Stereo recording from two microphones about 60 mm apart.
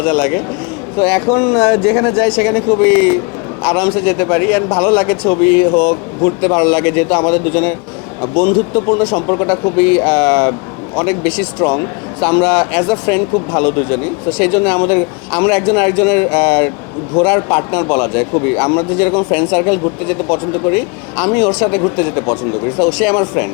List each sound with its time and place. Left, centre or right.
0.0 s a man's voice: left